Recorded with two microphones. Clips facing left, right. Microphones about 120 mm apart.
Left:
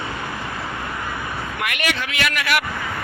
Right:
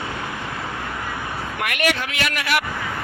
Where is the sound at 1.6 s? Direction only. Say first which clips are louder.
Right 3 dB; 45° right (ahead or behind).